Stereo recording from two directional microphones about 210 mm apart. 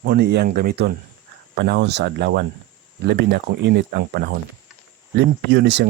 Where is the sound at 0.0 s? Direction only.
50° right (ahead or behind).